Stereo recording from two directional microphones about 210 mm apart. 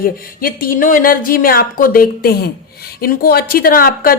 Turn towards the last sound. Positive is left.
turn(degrees=45)  # may be behind; listen again after turning